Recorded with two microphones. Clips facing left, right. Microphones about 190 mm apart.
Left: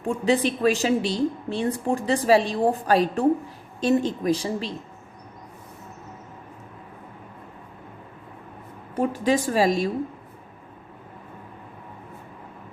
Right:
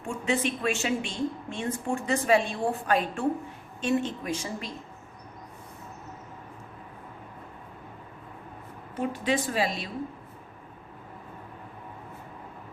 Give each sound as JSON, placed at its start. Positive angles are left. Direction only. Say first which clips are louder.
{"t": 0.0, "sound": "a woman's voice", "louder": "left 6 dB", "side_deg": 35}
{"t": 9.0, "sound": "a woman's voice", "louder": "left 6 dB", "side_deg": 40}